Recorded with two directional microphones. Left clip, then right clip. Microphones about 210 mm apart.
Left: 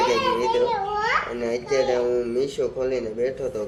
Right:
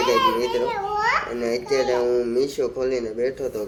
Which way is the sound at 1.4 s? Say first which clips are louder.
Right 1 dB; centre (ahead or behind).